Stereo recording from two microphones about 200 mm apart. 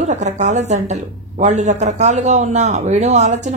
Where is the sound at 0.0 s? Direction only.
35° right (ahead or behind).